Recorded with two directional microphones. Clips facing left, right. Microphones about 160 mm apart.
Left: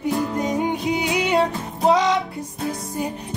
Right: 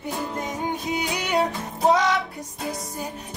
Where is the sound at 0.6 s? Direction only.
20° left (ahead or behind).